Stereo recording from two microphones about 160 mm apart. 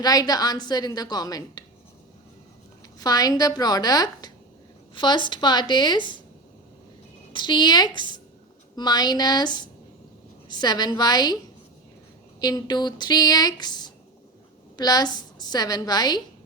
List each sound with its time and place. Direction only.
0.0 s a woman's voice: 25° left (ahead or behind)
3.0 s a woman's voice: 25° left (ahead or behind)
7.3 s a woman's voice: 30° left (ahead or behind)
12.4 s a woman's voice: 25° left (ahead or behind)